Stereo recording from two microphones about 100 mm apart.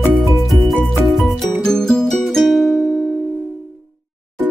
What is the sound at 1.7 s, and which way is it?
Music, 5° left (ahead or behind).